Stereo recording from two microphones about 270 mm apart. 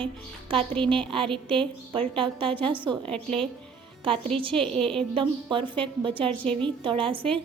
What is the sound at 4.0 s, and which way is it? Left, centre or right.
Speech, centre.